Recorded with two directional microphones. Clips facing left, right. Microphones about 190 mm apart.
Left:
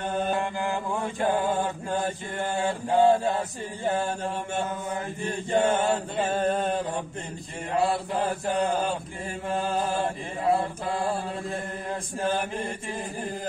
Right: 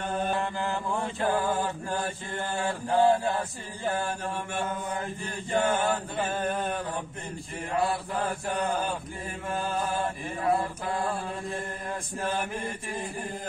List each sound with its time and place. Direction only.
0.4 s mantra: 15° left (ahead or behind)
5.5 s mantra: 25° left (ahead or behind)